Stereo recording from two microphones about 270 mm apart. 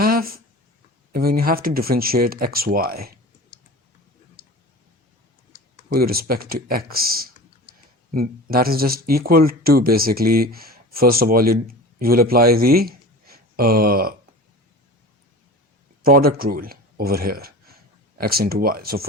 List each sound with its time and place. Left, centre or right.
0.0 s a sound: right
1.1 s speech: right
5.9 s a man's voice: right
16.0 s speech: right